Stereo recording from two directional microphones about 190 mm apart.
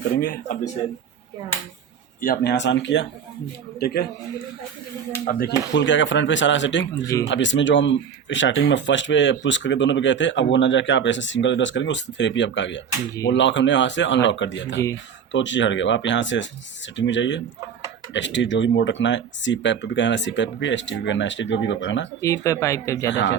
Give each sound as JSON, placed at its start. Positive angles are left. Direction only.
{"t": 0.2, "sound": "speech", "side_deg": 45}
{"t": 2.2, "sound": "speech", "side_deg": 55}
{"t": 3.8, "sound": "speech", "side_deg": 55}
{"t": 5.2, "sound": "speech", "side_deg": 50}
{"t": 22.2, "sound": "speech", "side_deg": 15}
{"t": 23.0, "sound": "speech", "side_deg": 70}